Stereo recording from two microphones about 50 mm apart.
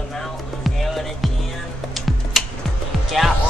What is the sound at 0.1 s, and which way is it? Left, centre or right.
Music, centre.